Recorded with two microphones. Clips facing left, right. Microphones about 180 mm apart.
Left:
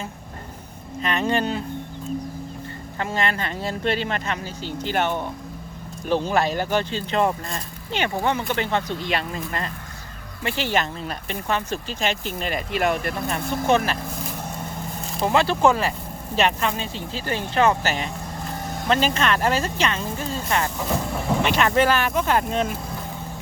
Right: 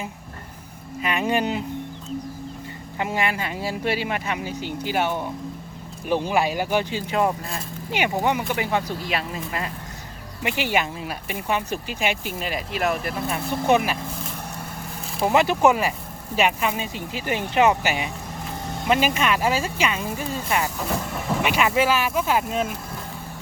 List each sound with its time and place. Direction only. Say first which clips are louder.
1.0 s speech: even; 10° right (ahead or behind)
3.0 s speech: even; 15° right (ahead or behind)
13.6 s speech: right 1 dB; 15° right (ahead or behind)
15.2 s speech: right 1 dB; 15° right (ahead or behind)